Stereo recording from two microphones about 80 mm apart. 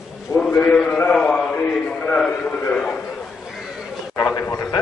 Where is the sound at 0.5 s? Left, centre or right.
Centre.